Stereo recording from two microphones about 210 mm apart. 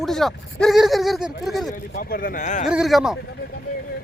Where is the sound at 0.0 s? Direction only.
Centre (ahead or behind).